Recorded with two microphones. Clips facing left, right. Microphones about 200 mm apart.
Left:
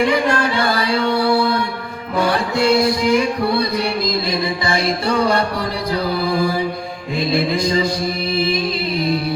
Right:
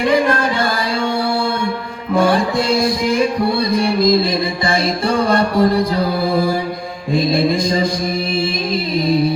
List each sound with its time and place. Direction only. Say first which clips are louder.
0.1 s music: right 2 dB; 50° right (ahead or behind)
2.1 s music: right 4 dB; 50° right (ahead or behind)